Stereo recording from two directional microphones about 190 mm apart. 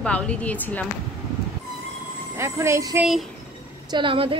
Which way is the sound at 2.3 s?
15° right (ahead or behind).